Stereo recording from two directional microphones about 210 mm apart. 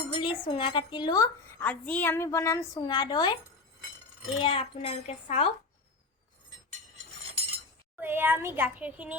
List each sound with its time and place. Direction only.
0.1 s speech: 25° left (ahead or behind)
1.6 s a woman's voice: 5° left (ahead or behind); by 3.3 s 20° left (ahead or behind)
4.4 s speech: 25° left (ahead or behind)
7.9 s a child's voice: 10° right (ahead or behind)